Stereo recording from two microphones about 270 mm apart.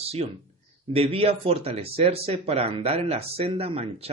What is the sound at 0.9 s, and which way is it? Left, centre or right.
Speech, right.